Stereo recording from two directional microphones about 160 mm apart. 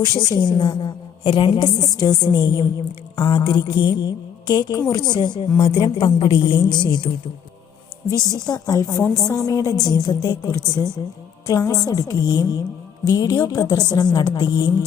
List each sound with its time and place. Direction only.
0.0 s a woman's voice: 25° left (ahead or behind)
8.3 s a woman's voice: 20° left (ahead or behind)